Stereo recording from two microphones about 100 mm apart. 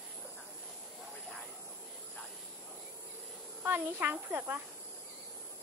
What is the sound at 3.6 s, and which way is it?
Speech, 20° right (ahead or behind).